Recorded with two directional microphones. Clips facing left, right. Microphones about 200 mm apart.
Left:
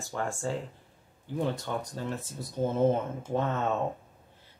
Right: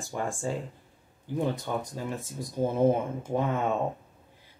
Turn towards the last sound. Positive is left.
turn(degrees=-10)  # may be behind; listen again after turning